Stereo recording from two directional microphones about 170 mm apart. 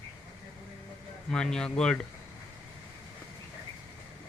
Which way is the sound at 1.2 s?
5° left (ahead or behind).